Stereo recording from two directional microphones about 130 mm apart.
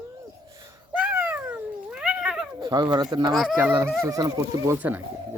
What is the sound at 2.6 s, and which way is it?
Speech, 30° right (ahead or behind).